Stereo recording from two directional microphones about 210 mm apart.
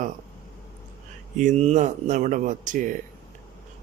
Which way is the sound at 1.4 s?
35° right (ahead or behind).